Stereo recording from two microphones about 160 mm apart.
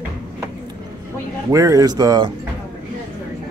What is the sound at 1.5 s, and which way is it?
Speech, 20° right (ahead or behind).